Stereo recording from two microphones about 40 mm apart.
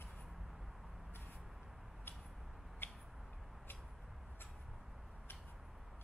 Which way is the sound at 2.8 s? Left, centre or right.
Left.